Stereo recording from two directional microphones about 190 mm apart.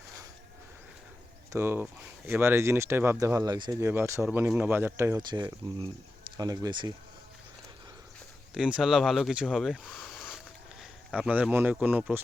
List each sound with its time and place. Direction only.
1.5 s speech: 10° right (ahead or behind)
8.5 s speech: 5° right (ahead or behind)